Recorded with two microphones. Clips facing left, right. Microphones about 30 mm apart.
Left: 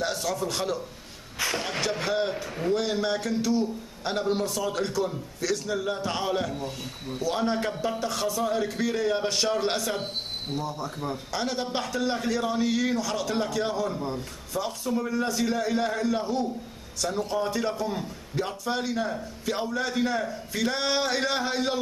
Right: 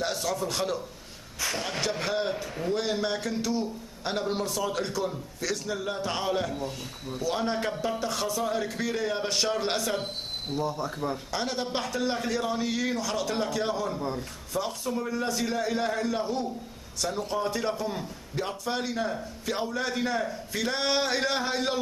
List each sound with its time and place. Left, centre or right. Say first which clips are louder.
0.0 s a man's voice: left 1 dB; centre
2.7 s a man's voice: left 2 dB; centre